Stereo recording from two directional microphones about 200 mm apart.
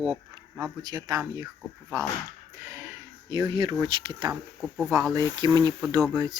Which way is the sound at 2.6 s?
15° right (ahead or behind).